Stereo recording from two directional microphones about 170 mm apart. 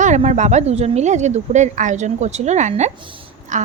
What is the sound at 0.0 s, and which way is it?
A woman's voice, 45° right (ahead or behind).